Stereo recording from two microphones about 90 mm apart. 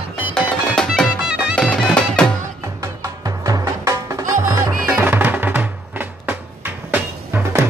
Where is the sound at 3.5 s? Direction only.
40° right (ahead or behind).